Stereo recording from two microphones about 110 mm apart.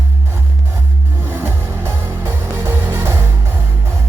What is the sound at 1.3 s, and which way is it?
Music, 20° right (ahead or behind).